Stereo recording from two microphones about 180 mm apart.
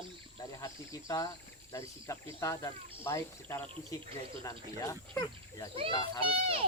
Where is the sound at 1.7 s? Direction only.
15° left (ahead or behind).